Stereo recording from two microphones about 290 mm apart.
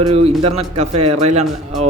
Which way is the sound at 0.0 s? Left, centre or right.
Right.